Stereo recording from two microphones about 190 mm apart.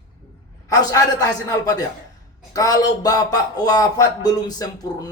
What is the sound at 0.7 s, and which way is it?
Speech, 20° left (ahead or behind).